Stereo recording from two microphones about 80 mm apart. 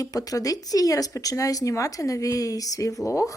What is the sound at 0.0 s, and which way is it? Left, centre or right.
Speech, left.